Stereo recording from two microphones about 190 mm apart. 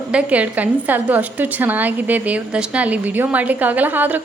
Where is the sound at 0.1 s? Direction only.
5° right (ahead or behind).